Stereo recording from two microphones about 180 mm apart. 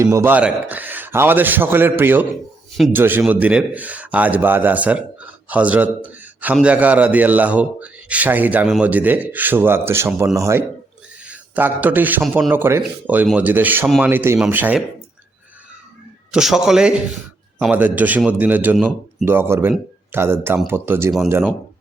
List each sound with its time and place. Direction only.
0.0 s a man's voice: 15° right (ahead or behind)
16.3 s a man's voice: centre (ahead or behind)